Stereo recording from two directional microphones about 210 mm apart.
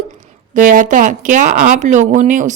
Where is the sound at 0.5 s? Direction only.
40° right (ahead or behind).